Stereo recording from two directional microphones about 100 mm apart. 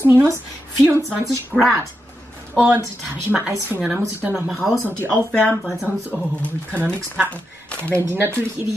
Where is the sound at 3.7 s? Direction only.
20° right (ahead or behind).